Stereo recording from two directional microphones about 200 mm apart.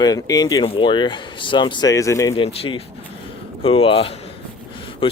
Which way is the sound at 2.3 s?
25° left (ahead or behind).